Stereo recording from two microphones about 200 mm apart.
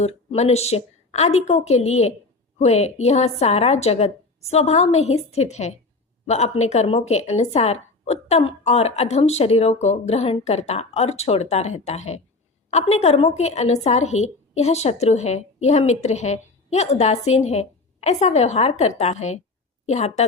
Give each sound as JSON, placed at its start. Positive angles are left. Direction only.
{"t": 0.0, "sound": "a woman's voice", "side_deg": 35}